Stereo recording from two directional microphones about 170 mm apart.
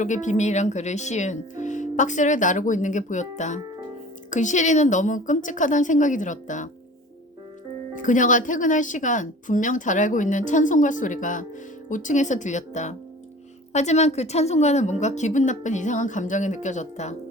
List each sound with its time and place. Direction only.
0.0 s speech: 45° left (ahead or behind)
7.9 s speech: 50° left (ahead or behind)